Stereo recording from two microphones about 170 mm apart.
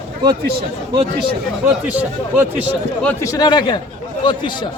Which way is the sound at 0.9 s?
30° right (ahead or behind).